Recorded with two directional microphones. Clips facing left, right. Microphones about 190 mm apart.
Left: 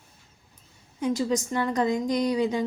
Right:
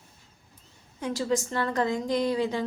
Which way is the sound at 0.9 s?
15° left (ahead or behind).